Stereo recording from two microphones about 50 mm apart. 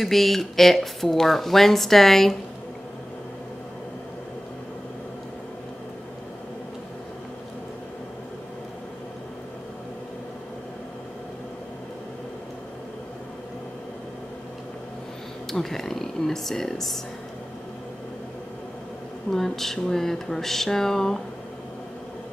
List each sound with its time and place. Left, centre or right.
0.0 s speech: centre
15.5 s speech: centre
19.3 s a sound: centre